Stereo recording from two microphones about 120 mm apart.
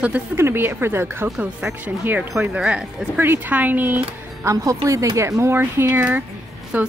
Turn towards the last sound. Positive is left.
turn(degrees=-15)  # may be behind; listen again after turning